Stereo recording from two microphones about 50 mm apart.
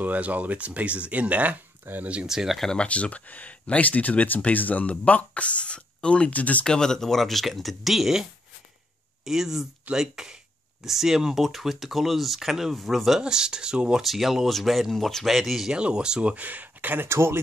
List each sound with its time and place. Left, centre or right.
0.0 s speech: right
2.2 s speech: centre
2.6 s speech: centre
2.9 s speech: left
6.6 s speech: centre
13.2 s speech: centre
14.0 s speech: centre
15.7 s speech: centre; by 17.1 s right
17.1 s speech: right